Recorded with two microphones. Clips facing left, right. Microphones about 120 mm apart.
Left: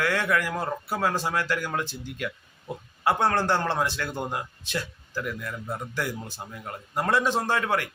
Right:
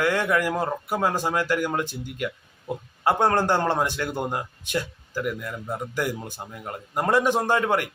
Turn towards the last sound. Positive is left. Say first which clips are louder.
# right 3 dB
turn(degrees=-15)  # may be behind; listen again after turning